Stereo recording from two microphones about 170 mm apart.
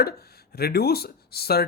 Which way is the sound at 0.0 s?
65° left (ahead or behind).